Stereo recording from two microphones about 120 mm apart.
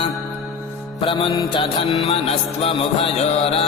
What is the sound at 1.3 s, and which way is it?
Music, 35° left (ahead or behind).